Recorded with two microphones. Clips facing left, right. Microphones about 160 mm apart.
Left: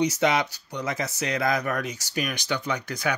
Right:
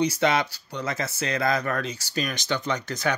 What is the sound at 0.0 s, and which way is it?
Speech, 20° left (ahead or behind).